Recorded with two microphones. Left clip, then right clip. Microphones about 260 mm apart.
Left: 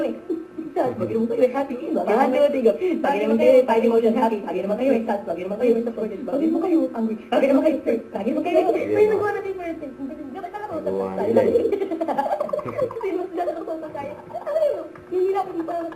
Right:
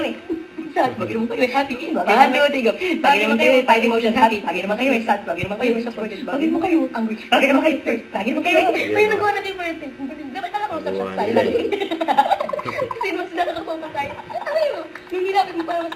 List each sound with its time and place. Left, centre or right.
0.8 s a woman's voice: centre
12.7 s chuckle: centre